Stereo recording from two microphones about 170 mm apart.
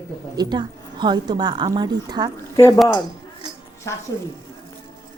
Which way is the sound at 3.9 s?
15° left (ahead or behind).